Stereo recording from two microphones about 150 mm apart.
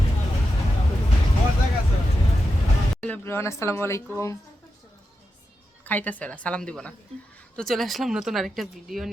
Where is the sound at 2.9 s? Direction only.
10° left (ahead or behind).